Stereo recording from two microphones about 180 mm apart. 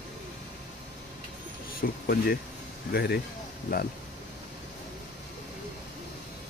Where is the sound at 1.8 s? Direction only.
55° left (ahead or behind).